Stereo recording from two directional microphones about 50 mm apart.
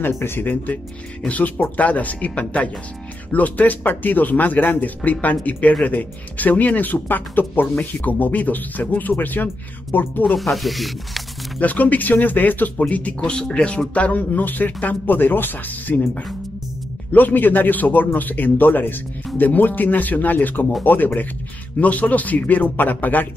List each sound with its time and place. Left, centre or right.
0.1 s speech: left
1.2 s speech: left
10.3 s speech: centre
11.6 s speech: left
17.1 s speech: left